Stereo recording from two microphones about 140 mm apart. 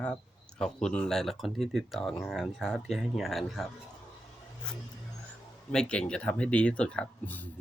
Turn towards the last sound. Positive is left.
turn(degrees=10)  # may be behind; listen again after turning